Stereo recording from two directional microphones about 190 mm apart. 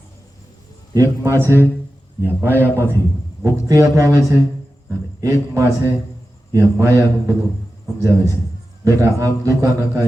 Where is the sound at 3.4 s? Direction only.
15° right (ahead or behind).